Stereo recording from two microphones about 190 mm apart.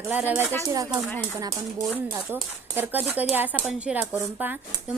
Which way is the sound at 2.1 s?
10° right (ahead or behind).